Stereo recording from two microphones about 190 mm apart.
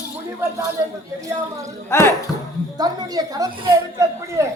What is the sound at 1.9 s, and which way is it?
Speech, 15° left (ahead or behind).